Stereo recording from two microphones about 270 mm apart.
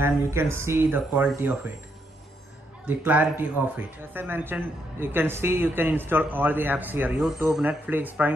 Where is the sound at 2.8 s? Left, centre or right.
Centre.